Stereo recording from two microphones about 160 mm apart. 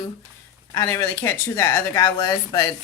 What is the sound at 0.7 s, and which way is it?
Speech, 15° left (ahead or behind).